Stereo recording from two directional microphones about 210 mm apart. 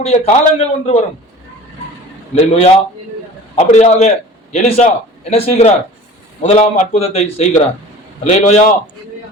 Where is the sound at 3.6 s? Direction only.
30° left (ahead or behind).